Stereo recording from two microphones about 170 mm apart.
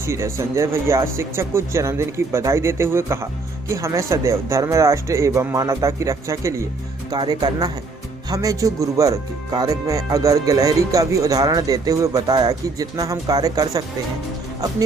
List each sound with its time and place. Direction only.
0.0 s speech: 15° right (ahead or behind)